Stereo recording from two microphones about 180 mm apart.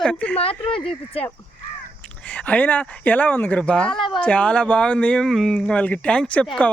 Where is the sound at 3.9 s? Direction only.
30° left (ahead or behind).